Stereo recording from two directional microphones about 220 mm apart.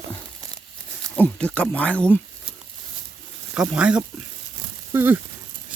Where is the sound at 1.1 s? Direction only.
5° left (ahead or behind).